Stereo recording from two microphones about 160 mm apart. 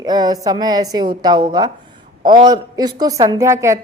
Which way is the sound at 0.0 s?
25° right (ahead or behind).